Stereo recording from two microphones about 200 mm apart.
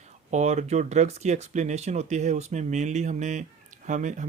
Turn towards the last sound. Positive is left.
turn(degrees=-40)  # may be behind; listen again after turning